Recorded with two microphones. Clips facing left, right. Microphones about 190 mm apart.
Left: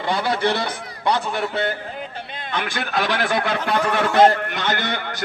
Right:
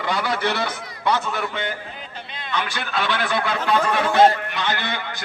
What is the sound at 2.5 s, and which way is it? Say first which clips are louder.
A man's voice: left 1 dB; 50° left (ahead or behind).